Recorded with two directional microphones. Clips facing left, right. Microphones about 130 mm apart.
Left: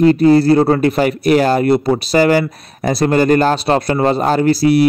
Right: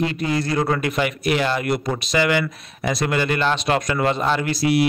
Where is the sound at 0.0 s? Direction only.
40° left (ahead or behind).